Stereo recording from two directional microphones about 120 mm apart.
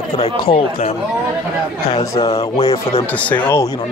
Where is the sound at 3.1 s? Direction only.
15° left (ahead or behind).